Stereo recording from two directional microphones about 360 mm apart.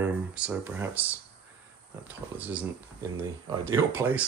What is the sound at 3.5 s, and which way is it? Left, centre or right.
Speech, centre.